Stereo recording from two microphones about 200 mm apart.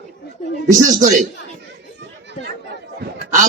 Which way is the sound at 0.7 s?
40° right (ahead or behind).